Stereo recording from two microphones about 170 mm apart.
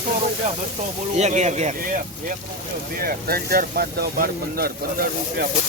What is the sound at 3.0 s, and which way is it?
Speech, 60° right (ahead or behind).